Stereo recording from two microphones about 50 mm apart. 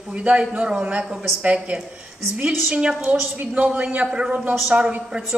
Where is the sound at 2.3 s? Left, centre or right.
Right.